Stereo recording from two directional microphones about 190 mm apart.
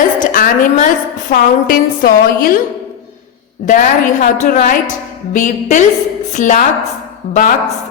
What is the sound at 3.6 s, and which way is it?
A woman's voice, 45° left (ahead or behind).